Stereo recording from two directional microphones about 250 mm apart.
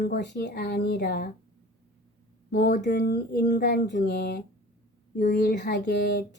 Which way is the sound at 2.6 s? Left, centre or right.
Left.